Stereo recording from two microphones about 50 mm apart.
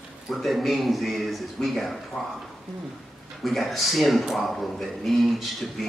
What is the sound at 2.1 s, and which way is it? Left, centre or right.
Speech, centre.